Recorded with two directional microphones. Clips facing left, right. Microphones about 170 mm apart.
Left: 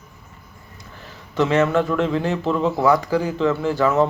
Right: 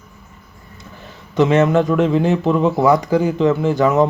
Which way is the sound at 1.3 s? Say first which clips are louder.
Right 4 dB; 20° right (ahead or behind).